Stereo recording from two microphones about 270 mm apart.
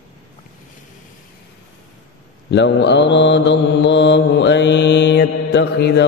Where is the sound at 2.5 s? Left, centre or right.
Left.